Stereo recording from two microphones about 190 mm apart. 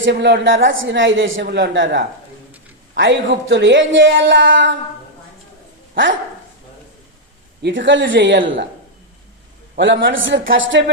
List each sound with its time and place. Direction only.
0.0 s a woman's voice: 65° right (ahead or behind)
7.6 s a woman's voice: 75° right (ahead or behind)
9.7 s speech: 70° right (ahead or behind)